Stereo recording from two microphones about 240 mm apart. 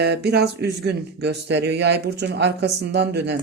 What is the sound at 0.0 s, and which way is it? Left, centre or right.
Speech, right.